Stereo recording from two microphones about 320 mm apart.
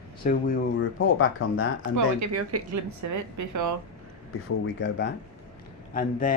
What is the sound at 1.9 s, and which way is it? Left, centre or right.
A woman's voice, right.